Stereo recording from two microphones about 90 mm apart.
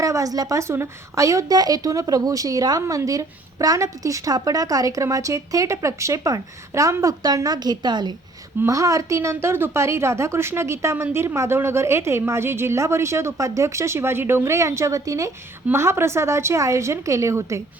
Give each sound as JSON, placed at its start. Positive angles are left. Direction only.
{"t": 0.0, "sound": "a woman's voice", "side_deg": -40}
{"t": 8.6, "sound": "a woman's voice", "side_deg": -35}